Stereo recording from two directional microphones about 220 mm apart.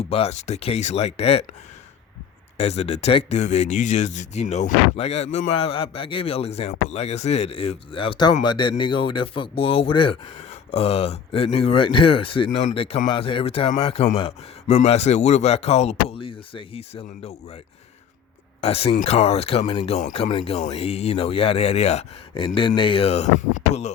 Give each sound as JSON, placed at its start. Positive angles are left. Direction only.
{"t": 0.0, "sound": "speech", "side_deg": 25}
{"t": 2.6, "sound": "speech", "side_deg": 30}
{"t": 18.6, "sound": "speech", "side_deg": 25}